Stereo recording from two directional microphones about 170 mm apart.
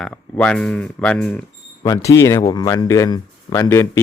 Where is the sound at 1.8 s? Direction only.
20° left (ahead or behind).